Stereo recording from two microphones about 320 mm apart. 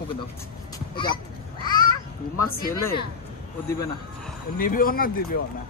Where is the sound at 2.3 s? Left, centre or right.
Left.